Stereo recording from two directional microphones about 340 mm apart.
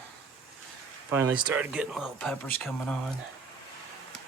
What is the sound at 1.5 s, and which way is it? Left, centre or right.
Speech, centre.